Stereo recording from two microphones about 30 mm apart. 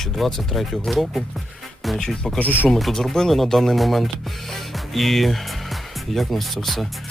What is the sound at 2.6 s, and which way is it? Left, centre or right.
Speech, centre.